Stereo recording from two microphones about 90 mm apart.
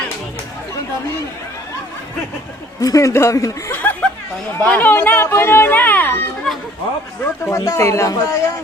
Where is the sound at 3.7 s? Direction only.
25° left (ahead or behind).